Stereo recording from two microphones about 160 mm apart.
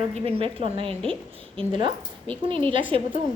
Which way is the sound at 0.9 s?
5° left (ahead or behind).